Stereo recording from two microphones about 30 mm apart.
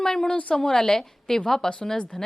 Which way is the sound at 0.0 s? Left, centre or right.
Centre.